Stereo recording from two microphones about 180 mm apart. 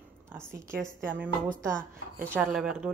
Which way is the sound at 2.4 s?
Centre (ahead or behind).